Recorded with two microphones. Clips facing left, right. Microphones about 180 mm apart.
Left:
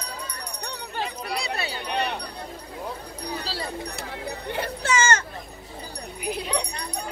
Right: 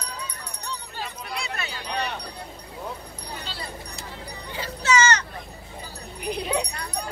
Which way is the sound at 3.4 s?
35° left (ahead or behind).